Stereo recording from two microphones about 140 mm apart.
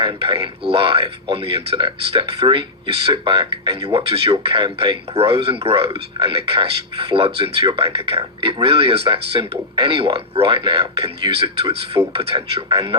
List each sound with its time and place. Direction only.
0.0 s speech: 40° right (ahead or behind)